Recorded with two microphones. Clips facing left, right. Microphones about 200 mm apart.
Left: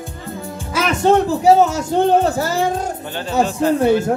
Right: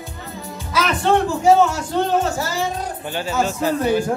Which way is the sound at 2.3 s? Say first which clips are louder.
Left 5 dB; 55° left (ahead or behind).